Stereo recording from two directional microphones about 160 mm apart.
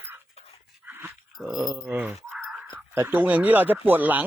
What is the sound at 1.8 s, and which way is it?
Speech, 10° right (ahead or behind).